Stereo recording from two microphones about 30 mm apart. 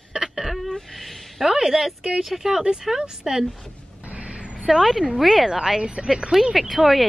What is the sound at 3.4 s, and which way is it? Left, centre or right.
Speech, centre.